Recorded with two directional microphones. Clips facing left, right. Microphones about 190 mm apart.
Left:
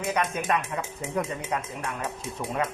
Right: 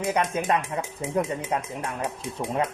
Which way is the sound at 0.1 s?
30° right (ahead or behind).